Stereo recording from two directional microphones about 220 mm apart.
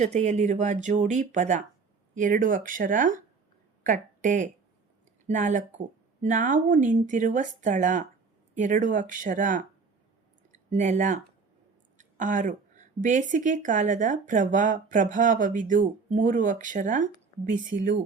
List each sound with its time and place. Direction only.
0.0 s a woman's voice: 30° right (ahead or behind)
10.7 s a woman's voice: 30° right (ahead or behind)